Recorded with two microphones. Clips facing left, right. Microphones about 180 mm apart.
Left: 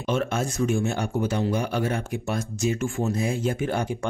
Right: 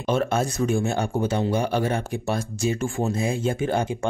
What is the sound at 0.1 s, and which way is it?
Speech, 35° right (ahead or behind).